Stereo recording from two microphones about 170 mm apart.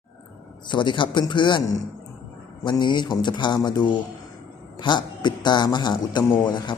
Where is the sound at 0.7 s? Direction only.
30° left (ahead or behind).